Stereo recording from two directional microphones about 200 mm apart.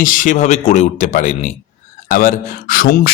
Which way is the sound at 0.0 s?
40° left (ahead or behind).